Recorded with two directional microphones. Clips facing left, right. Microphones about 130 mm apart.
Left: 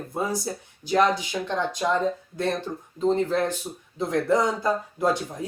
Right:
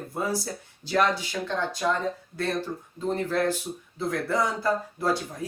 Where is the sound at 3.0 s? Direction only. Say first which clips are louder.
Left 3 dB; 20° left (ahead or behind).